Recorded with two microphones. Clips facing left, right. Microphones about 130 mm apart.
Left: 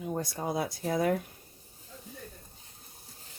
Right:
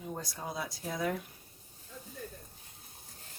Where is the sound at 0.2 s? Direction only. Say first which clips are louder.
Left 7 dB; 55° left (ahead or behind).